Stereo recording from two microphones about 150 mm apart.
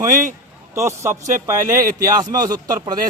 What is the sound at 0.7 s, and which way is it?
A man's voice, 15° right (ahead or behind).